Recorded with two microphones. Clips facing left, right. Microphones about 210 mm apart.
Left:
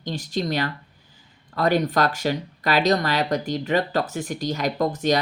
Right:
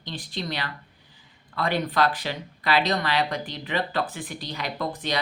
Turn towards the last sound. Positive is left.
turn(degrees=45)  # may be behind; listen again after turning